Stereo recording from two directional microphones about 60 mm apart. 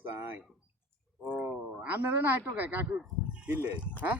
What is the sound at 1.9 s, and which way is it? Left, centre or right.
Speech, right.